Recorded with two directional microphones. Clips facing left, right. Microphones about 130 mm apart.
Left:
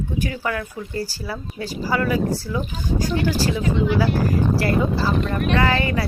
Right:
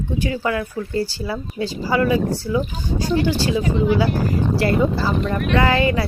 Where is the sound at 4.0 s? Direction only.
25° right (ahead or behind).